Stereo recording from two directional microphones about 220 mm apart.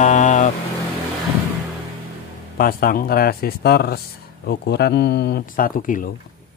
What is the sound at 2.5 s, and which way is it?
Speech, 40° left (ahead or behind).